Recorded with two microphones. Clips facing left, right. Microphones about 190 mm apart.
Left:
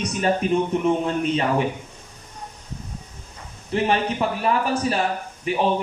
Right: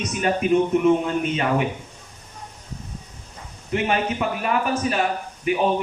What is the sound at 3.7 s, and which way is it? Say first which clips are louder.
Speech: left 1 dB; 30° left (ahead or behind).